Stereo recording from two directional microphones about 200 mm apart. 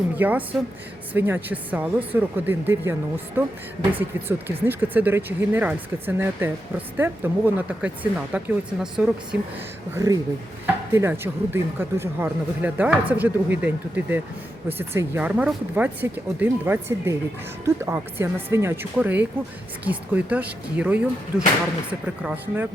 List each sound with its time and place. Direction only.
0.2 s speech: 10° right (ahead or behind)
9.9 s speech: 15° right (ahead or behind)